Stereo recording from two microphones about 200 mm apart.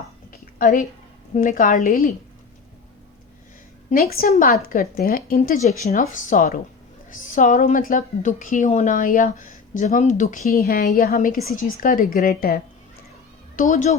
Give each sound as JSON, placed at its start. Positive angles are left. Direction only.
{"t": 0.3, "sound": "a sound", "side_deg": 45}
{"t": 1.3, "sound": "a woman's voice", "side_deg": 40}
{"t": 3.8, "sound": "a woman's voice", "side_deg": 45}
{"t": 13.6, "sound": "a woman's voice", "side_deg": 40}